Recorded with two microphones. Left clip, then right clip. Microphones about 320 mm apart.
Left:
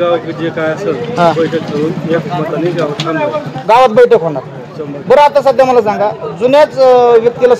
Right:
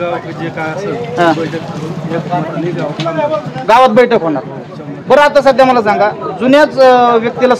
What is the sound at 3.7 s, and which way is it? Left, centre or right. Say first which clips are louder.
A man's voice: left 1 dB; left.